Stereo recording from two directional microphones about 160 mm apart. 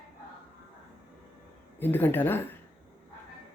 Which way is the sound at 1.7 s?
10° left (ahead or behind).